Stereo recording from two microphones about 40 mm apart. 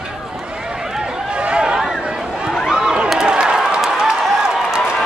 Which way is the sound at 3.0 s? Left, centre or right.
Centre.